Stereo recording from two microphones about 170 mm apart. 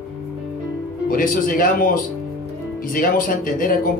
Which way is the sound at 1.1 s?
55° left (ahead or behind).